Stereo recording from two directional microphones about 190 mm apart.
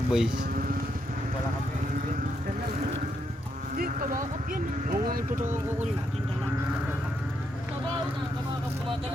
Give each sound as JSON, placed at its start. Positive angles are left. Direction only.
{"t": 0.1, "sound": "speech", "side_deg": -5}
{"t": 3.8, "sound": "speech", "side_deg": -45}